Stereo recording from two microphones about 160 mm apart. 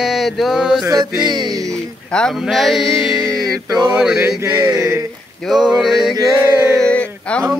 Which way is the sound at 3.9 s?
5° right (ahead or behind).